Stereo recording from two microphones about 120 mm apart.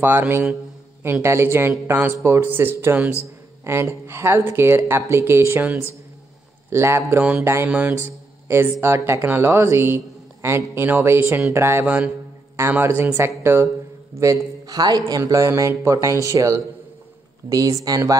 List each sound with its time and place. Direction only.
0.0 s a man's voice: 15° right (ahead or behind)
7.2 s a man's voice: 10° right (ahead or behind); by 18.1 s 30° right (ahead or behind)